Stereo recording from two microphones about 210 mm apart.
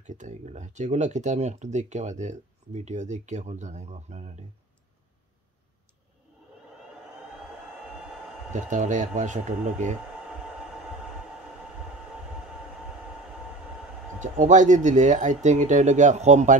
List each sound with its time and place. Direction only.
0.0 s speech: 35° right (ahead or behind)
8.5 s speech: 35° right (ahead or behind)
14.2 s speech: 35° right (ahead or behind)